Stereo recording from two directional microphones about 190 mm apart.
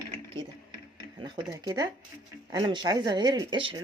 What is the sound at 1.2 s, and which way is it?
Speech, 20° right (ahead or behind).